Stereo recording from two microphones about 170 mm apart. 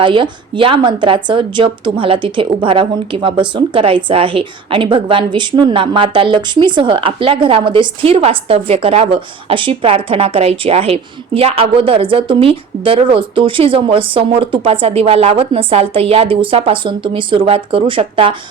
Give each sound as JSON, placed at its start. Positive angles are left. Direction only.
{"t": 0.0, "sound": "a woman's voice", "side_deg": -30}